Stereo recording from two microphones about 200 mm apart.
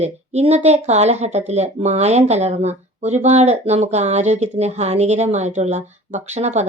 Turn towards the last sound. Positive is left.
turn(degrees=-35)  # may be behind; listen again after turning